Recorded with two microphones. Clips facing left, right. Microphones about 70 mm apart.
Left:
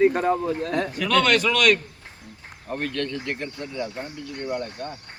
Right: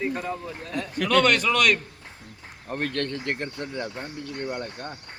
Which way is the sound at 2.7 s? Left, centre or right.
Right.